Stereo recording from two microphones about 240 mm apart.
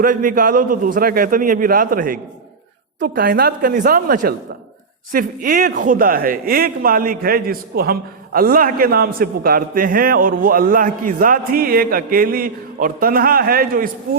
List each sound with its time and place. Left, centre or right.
0.0 s speech: right